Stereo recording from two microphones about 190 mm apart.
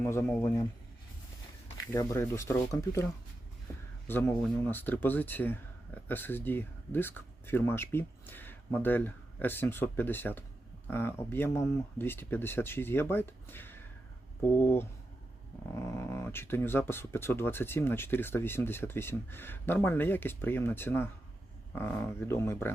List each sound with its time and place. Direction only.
0.0 s speech: 15° left (ahead or behind)
1.8 s speech: 15° left (ahead or behind)